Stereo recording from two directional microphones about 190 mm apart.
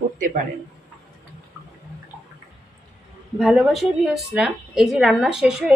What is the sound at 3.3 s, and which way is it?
A woman's voice, 5° right (ahead or behind).